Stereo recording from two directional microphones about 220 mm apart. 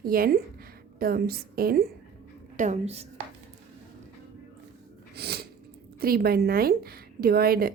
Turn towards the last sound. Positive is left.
turn(degrees=-45)  # may be behind; listen again after turning